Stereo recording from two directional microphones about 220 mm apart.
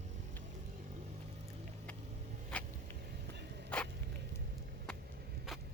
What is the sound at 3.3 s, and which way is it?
Vehicle, 50° right (ahead or behind).